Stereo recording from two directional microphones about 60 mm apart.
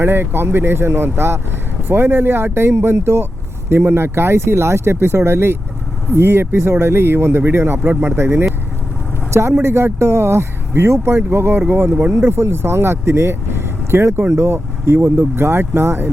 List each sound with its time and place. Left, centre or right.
0.0 s speech: right
9.6 s speech: right